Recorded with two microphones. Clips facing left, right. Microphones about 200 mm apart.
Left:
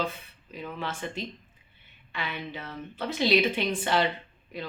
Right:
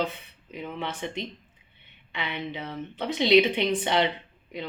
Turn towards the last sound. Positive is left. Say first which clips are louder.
# right 2 dB
turn(degrees=-20)  # may be behind; listen again after turning